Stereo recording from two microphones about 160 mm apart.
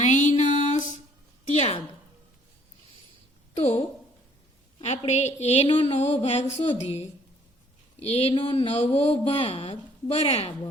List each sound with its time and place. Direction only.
0.0 s a sound: 50° left (ahead or behind)
3.5 s a woman's voice: 45° left (ahead or behind)
5.6 s speech: 35° left (ahead or behind)